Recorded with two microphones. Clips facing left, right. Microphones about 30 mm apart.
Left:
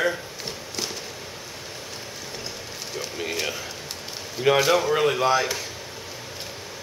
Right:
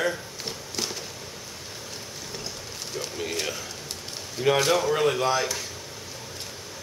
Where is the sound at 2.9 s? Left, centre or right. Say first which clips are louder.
Left 1 dB; centre.